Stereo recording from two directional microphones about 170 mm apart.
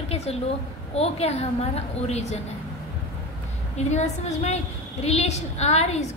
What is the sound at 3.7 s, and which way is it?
A woman's voice, 40° left (ahead or behind).